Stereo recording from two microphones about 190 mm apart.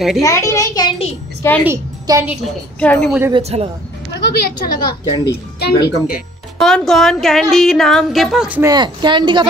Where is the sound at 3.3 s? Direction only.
35° right (ahead or behind).